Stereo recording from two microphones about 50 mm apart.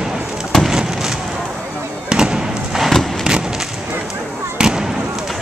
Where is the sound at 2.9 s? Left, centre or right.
Centre.